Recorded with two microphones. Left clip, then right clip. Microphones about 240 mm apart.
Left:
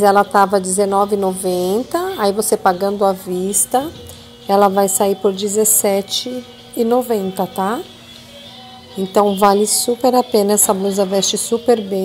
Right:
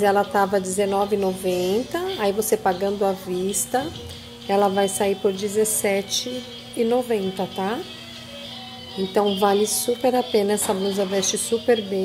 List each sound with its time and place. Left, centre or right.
0.0 s a woman's voice: left
9.1 s a woman's voice: left